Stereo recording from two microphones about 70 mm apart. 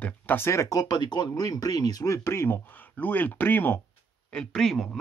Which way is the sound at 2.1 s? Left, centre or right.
Left.